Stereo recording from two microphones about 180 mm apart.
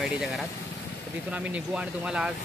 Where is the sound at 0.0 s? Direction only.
Centre (ahead or behind).